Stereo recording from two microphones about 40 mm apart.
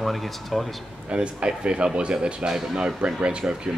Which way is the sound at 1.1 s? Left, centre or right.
Right.